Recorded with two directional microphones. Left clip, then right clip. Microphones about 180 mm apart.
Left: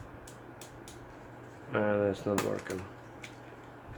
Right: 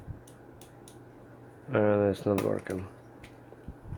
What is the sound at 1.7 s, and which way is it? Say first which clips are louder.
Speech: right 4 dB; 50° right (ahead or behind).